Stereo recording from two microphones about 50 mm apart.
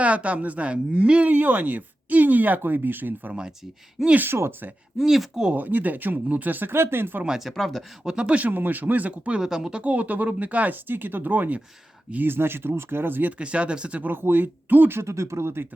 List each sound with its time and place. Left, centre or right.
0.0 s speech: right
1.3 s speech: right
4.3 s speech: right
4.9 s speech: centre
5.5 s speech: right
7.3 s speech: centre
8.0 s speech: centre
9.4 s speech: centre
9.8 s speech: right
10.8 s speech: right
13.4 s speech: right
14.1 s speech: right
14.9 s speech: right